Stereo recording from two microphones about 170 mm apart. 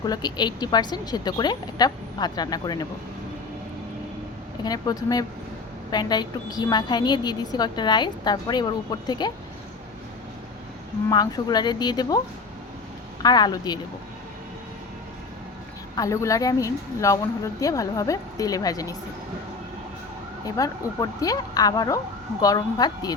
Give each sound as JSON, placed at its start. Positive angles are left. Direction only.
{"t": 0.0, "sound": "a woman's voice", "side_deg": 25}
{"t": 4.6, "sound": "a woman's voice", "side_deg": 25}
{"t": 11.1, "sound": "a woman's voice", "side_deg": 25}
{"t": 13.2, "sound": "a woman's voice", "side_deg": 25}
{"t": 16.0, "sound": "a woman's voice", "side_deg": 15}
{"t": 20.4, "sound": "a woman's voice", "side_deg": 20}